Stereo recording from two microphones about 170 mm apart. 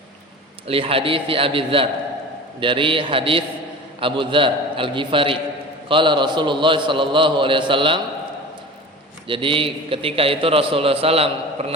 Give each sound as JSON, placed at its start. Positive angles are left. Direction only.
{"t": 0.7, "sound": "a man's voice", "side_deg": -35}
{"t": 9.2, "sound": "a man's voice", "side_deg": -30}